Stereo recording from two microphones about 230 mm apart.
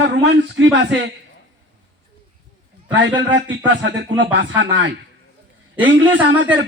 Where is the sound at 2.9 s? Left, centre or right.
Right.